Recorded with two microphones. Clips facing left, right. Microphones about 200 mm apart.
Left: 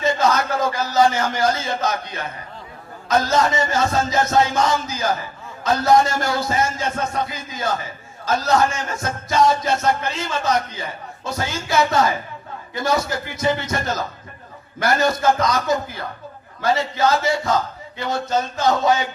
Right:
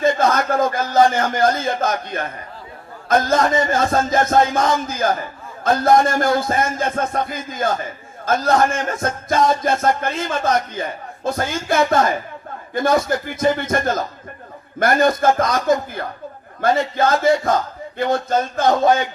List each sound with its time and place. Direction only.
0.0 s a man's voice: 55° right (ahead or behind)
3.2 s a man's voice: 55° right (ahead or behind)